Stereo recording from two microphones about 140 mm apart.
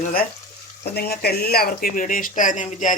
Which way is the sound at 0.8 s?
90° left.